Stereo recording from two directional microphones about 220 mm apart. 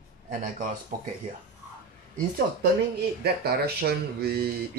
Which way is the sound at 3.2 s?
45° right (ahead or behind).